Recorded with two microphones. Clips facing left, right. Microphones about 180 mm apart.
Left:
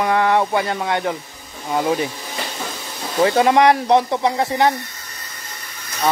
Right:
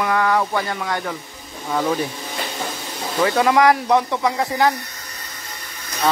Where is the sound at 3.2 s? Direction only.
30° left (ahead or behind).